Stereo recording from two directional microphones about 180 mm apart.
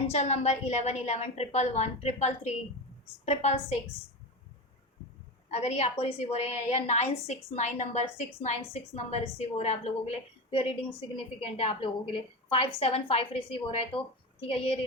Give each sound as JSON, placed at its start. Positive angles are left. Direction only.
{"t": 0.1, "sound": "a woman's voice", "side_deg": 40}
{"t": 5.5, "sound": "a woman's voice", "side_deg": 40}